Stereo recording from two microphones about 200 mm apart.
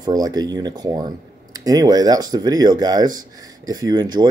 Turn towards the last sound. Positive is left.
turn(degrees=-20)  # may be behind; listen again after turning